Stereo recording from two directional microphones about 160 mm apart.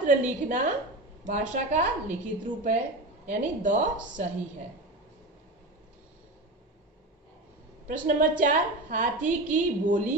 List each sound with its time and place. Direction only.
0.0 s a woman's voice: 50° right (ahead or behind)
8.2 s a woman's voice: 55° right (ahead or behind)